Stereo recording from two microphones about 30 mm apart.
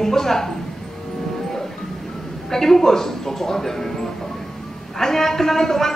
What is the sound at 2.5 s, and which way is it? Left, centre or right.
A woman's voice, centre.